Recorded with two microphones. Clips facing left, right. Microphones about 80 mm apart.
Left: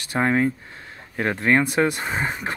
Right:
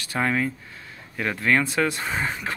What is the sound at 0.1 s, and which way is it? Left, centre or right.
Speech, left.